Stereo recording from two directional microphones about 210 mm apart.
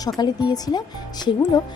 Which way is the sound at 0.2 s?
20° left (ahead or behind).